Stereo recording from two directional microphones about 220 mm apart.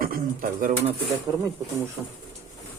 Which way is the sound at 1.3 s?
20° right (ahead or behind).